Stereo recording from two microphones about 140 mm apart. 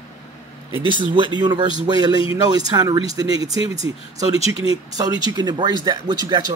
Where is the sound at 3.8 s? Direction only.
45° left (ahead or behind).